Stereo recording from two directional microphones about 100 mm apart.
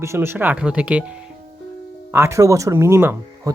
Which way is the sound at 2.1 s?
25° right (ahead or behind).